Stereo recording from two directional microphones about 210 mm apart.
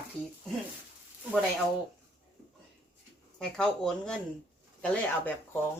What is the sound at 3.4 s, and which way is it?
Speech, 5° left (ahead or behind).